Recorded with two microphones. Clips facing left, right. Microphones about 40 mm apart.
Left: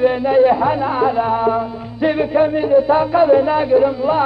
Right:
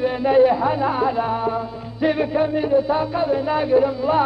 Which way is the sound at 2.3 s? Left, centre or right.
Left.